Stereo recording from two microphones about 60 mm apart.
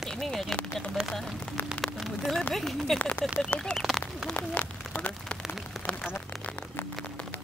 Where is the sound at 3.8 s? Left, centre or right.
Centre.